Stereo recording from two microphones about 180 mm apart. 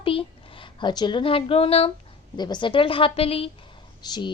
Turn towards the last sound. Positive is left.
turn(degrees=25)  # may be behind; listen again after turning